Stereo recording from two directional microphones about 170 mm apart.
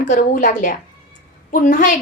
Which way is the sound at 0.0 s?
50° left (ahead or behind).